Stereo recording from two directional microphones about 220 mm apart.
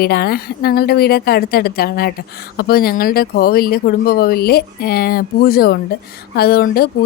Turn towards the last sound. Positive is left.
turn(degrees=45)  # may be behind; listen again after turning